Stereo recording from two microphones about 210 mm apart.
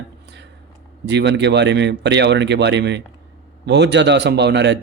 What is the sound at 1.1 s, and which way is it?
Speech, 55° right (ahead or behind).